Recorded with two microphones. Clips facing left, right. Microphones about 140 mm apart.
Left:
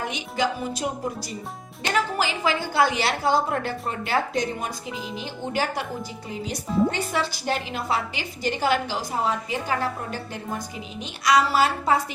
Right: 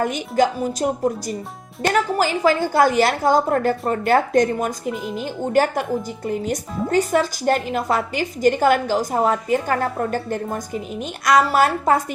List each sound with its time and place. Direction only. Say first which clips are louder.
0.0 s a woman's voice: right 7 dB; 45° right (ahead or behind)